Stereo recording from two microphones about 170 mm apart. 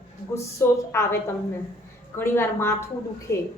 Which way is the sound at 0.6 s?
15° left (ahead or behind).